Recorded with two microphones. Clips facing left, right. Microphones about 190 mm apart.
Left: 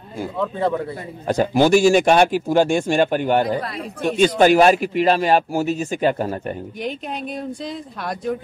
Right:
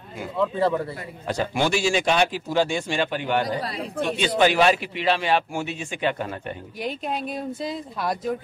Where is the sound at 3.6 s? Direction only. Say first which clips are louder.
Left 2 dB; 35° right (ahead or behind).